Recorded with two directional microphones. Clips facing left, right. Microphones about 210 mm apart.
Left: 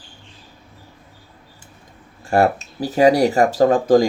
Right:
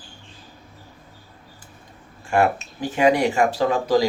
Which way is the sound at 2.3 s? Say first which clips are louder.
Left 3 dB; 35° left (ahead or behind).